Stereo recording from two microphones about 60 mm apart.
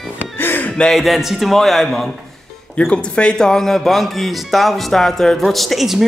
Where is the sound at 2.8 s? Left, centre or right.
Centre.